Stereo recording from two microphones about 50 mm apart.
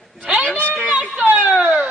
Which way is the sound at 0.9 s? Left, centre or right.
Right.